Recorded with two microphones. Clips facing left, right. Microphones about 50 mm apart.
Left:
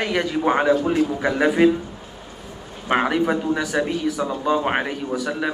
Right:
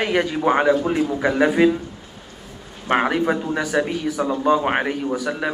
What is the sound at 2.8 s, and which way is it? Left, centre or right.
A man's voice, right.